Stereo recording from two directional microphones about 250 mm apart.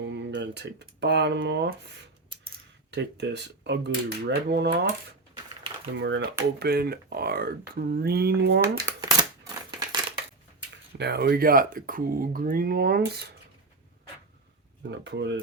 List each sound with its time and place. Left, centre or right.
0.0 s speech: right
2.3 s coin: centre
2.9 s speech: right
5.9 s speech: right
8.6 s crumpling: centre
10.9 s speech: right
14.8 s speech: right